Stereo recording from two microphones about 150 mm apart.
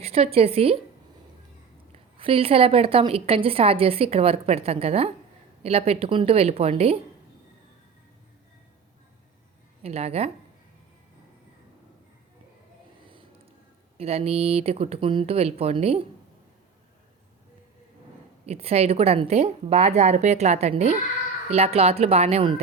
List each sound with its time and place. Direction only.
0.0 s a woman's voice: 45° right (ahead or behind)
2.1 s a woman's voice: 40° right (ahead or behind)
9.8 s speech: 45° right (ahead or behind)
14.0 s a woman's voice: 40° right (ahead or behind)
18.4 s a woman's voice: 45° right (ahead or behind)